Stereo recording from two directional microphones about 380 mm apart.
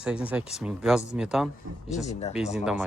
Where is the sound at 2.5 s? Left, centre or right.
Centre.